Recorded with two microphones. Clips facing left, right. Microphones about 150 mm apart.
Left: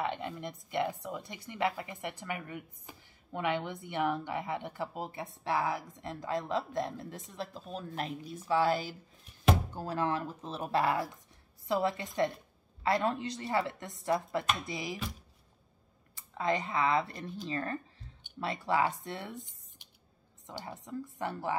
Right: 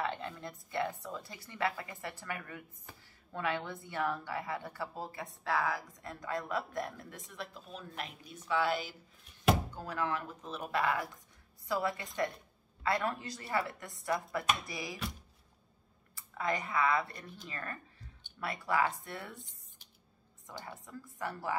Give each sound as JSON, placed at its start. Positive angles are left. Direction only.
{"t": 0.0, "sound": "a woman's voice", "side_deg": 15}
{"t": 16.2, "sound": "a woman's voice", "side_deg": 25}
{"t": 20.4, "sound": "a woman's voice", "side_deg": 20}